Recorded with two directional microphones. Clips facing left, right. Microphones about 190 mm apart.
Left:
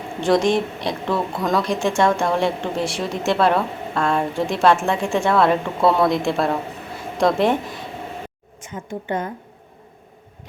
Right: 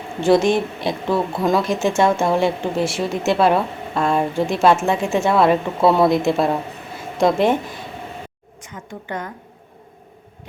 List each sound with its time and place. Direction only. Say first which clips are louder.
0.2 s speech: right 2 dB; 5° right (ahead or behind)
8.7 s a woman's voice: left 4 dB; 25° left (ahead or behind)